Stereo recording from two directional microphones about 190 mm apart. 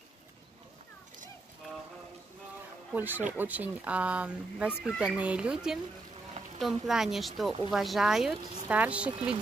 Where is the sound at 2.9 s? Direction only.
10° right (ahead or behind).